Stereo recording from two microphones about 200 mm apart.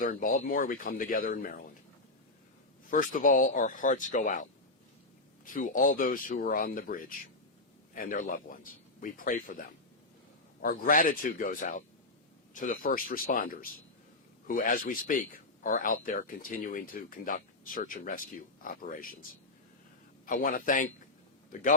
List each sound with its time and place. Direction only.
0.0 s speech: 45° left (ahead or behind)
2.9 s speech: 45° left (ahead or behind)
5.5 s speech: 40° left (ahead or behind)
20.2 s speech: 45° left (ahead or behind)